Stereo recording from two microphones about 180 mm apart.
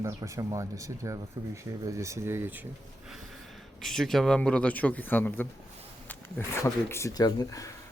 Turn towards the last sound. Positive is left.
turn(degrees=20)  # may be behind; listen again after turning